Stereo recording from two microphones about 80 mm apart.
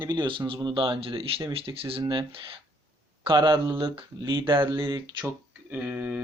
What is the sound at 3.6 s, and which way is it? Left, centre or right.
Speech, right.